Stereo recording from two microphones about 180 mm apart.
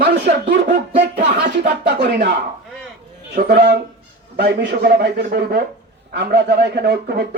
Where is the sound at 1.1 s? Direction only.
40° right (ahead or behind).